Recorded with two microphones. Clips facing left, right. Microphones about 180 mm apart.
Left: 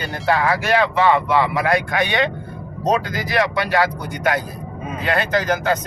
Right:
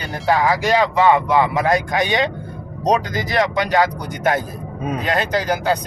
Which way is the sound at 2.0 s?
40° right (ahead or behind).